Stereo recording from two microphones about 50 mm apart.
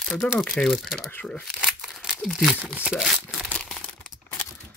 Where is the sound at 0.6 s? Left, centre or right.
Centre.